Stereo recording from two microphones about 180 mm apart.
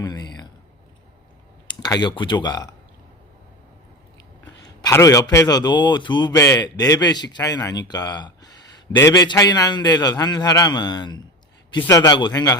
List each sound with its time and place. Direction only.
0.0 s a sound: 20° left (ahead or behind)
1.8 s speech: 25° left (ahead or behind)
4.6 s speech: 20° left (ahead or behind)